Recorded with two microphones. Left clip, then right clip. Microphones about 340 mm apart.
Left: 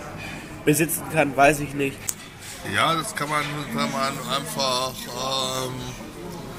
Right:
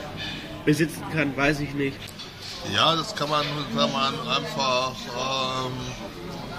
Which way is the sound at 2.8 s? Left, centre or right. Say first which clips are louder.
Even; centre.